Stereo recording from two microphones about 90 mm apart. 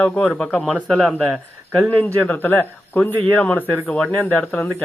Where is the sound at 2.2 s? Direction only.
20° left (ahead or behind).